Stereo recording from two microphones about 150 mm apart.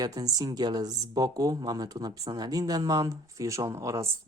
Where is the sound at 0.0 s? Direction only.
25° right (ahead or behind).